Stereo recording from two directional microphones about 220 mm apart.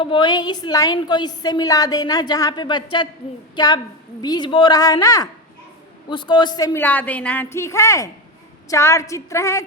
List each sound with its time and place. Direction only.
0.0 s a woman's voice: 20° left (ahead or behind)